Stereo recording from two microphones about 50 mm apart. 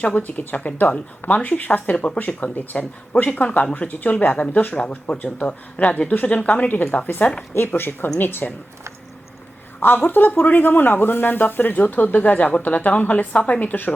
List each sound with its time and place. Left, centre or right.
0.0 s speech: left
6.7 s speech: left
7.2 s speech: left
7.7 s speech: left
9.8 s speech: left